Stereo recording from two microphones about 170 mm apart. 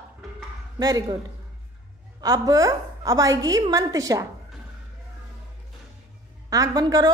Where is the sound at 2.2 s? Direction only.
20° right (ahead or behind).